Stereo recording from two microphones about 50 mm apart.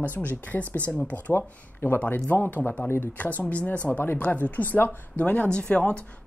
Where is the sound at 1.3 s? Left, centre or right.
Left.